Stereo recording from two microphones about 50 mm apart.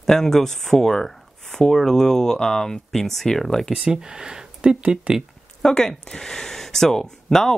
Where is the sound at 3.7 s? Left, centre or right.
Centre.